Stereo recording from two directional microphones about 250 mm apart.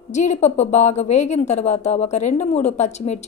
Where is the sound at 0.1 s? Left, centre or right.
Left.